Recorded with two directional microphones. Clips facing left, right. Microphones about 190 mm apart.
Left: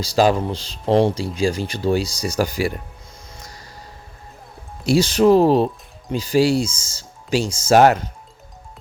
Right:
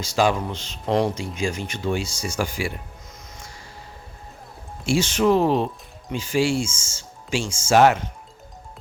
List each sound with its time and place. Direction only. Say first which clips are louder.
0.0 s speech: left 4 dB; 35° left (ahead or behind)
4.9 s speech: left 5 dB; 35° left (ahead or behind)